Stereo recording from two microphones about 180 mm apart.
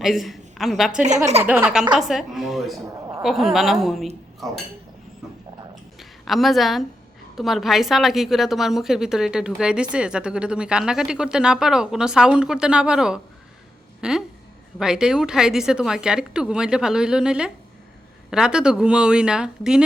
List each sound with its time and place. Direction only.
0.0 s a woman's voice: centre (ahead or behind)
6.0 s a woman's voice: centre (ahead or behind)